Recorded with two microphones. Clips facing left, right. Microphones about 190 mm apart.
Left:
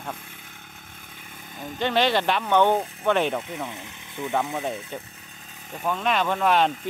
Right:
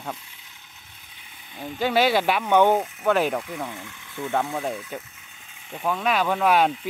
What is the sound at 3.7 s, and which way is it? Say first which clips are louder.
Speech: right 1 dB; 20° left (ahead or behind).